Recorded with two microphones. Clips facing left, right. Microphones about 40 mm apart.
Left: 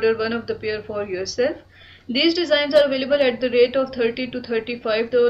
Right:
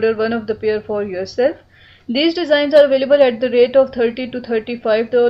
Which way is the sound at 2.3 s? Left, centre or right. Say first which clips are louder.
Right 4 dB; centre.